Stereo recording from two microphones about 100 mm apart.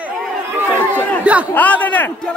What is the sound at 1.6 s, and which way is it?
Speech, 15° left (ahead or behind).